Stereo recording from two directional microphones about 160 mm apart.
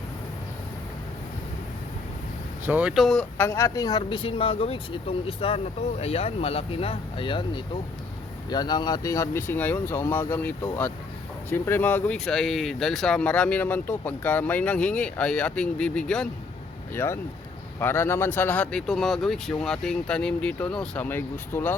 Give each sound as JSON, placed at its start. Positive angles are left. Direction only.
{"t": 2.6, "sound": "speech", "side_deg": -10}
{"t": 3.3, "sound": "speech", "side_deg": 15}
{"t": 16.9, "sound": "speech", "side_deg": 15}